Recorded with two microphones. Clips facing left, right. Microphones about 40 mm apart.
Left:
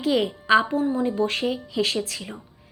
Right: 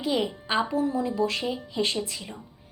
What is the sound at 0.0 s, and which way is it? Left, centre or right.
Speech, left.